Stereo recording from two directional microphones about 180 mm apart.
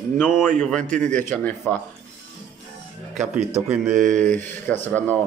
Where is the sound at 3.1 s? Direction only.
40° right (ahead or behind).